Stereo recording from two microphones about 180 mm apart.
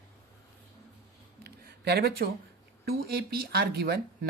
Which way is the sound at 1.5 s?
65° right (ahead or behind).